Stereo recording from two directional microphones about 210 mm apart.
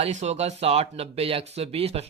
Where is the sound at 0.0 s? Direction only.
30° right (ahead or behind).